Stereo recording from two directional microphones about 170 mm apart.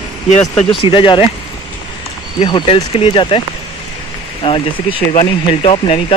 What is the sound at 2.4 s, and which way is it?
Speech, 30° left (ahead or behind).